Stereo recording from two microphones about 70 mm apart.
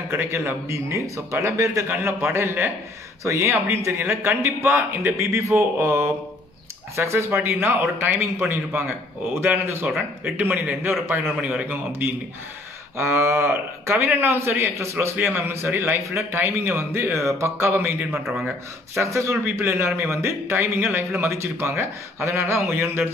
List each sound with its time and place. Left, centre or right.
0.1 s a man's voice: right
12.9 s a man's voice: right
18.9 s a man's voice: right